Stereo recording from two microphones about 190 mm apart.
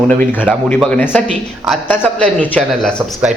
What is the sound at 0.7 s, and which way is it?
Speech, 5° left (ahead or behind).